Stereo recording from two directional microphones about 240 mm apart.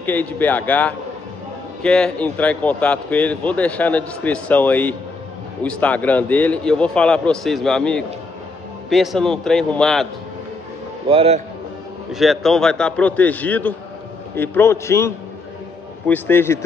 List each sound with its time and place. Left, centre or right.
0.0 s speech: centre
11.1 s a man's voice: right
12.1 s speech: centre